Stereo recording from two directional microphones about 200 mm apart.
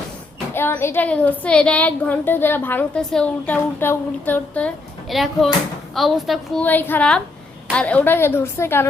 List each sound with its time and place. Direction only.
0.5 s a woman's voice: 10° left (ahead or behind)